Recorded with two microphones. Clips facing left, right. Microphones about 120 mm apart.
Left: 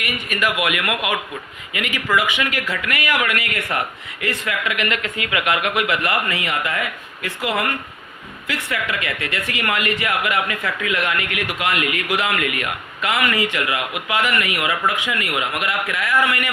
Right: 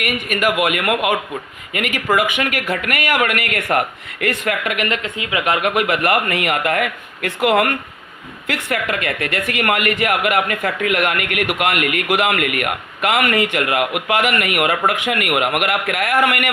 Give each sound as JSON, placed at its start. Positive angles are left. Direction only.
{"t": 0.0, "sound": "speech", "side_deg": -50}
{"t": 4.9, "sound": "speech", "side_deg": -25}
{"t": 5.6, "sound": "speech", "side_deg": -45}
{"t": 8.4, "sound": "speech", "side_deg": -50}